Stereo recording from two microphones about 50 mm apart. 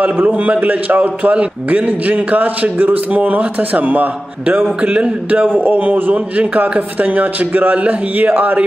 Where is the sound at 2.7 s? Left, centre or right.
Right.